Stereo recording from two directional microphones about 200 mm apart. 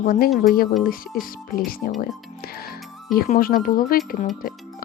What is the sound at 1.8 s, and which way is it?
Speech, 50° left (ahead or behind).